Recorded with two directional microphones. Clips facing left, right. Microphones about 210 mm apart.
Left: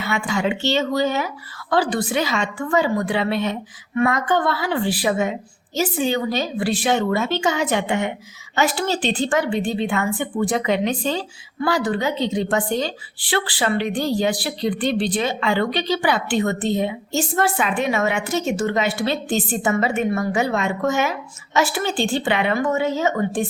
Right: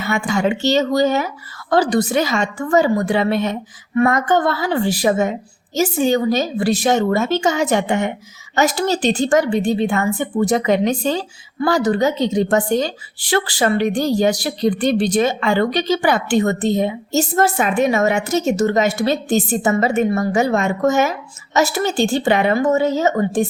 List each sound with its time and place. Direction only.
0.0 s a woman's voice: 45° right (ahead or behind)